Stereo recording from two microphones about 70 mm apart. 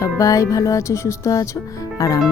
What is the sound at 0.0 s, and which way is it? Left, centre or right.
Speech, left.